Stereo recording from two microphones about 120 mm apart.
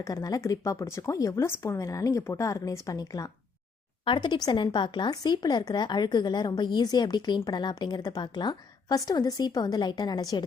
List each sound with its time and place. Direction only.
0.0 s speech: 30° left (ahead or behind)
4.0 s a woman's voice: 40° left (ahead or behind)